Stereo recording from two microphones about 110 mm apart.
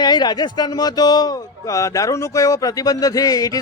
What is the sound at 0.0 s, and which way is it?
A man's voice, 40° left (ahead or behind).